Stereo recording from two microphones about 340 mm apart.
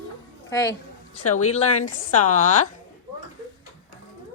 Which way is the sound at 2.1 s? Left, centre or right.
Left.